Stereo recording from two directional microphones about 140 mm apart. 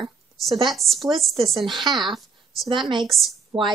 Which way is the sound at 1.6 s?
35° right (ahead or behind).